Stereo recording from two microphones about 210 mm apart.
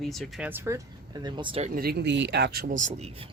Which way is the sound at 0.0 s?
Centre (ahead or behind).